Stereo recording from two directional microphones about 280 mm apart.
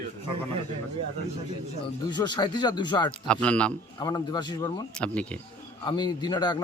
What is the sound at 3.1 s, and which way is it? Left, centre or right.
Speech, centre.